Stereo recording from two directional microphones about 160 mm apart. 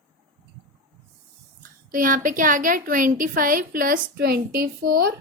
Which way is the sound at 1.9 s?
60° right (ahead or behind).